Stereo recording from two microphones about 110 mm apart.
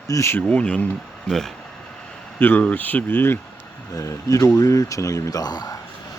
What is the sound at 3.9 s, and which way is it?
Speech, 30° left (ahead or behind).